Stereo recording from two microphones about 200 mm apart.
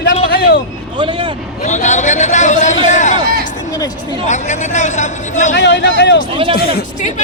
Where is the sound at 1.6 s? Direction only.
35° left (ahead or behind).